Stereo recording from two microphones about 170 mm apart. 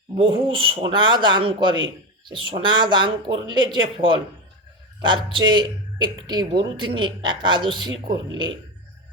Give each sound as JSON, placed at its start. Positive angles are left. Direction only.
{"t": 0.2, "sound": "speech", "side_deg": -30}